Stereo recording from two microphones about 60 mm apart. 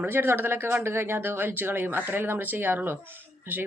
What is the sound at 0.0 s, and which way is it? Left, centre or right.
Speech, right.